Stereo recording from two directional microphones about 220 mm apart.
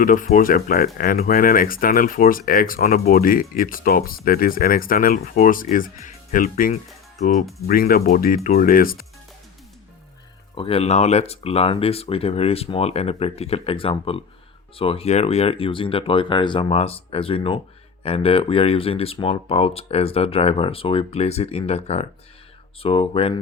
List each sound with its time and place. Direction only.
0.0 s speech: 35° left (ahead or behind)
10.5 s speech: 25° left (ahead or behind)